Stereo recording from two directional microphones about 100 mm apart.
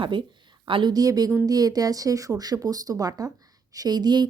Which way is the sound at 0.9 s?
40° right (ahead or behind).